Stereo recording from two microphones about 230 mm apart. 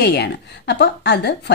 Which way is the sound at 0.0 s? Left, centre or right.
Left.